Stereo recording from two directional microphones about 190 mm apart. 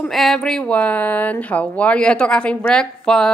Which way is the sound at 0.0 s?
Centre (ahead or behind).